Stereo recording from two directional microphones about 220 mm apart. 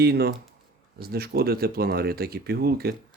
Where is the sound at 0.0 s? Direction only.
45° right (ahead or behind).